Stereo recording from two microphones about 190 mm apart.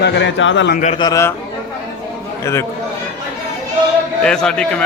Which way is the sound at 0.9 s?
20° left (ahead or behind).